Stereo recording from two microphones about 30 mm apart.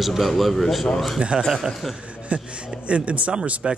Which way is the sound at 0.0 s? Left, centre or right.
Centre.